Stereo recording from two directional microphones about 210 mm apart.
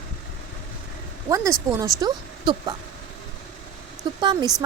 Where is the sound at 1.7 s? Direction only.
15° right (ahead or behind).